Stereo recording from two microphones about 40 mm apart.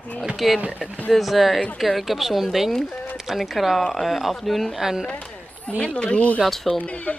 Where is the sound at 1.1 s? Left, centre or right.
Centre.